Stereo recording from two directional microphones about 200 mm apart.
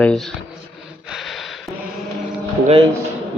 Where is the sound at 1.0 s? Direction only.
Centre (ahead or behind).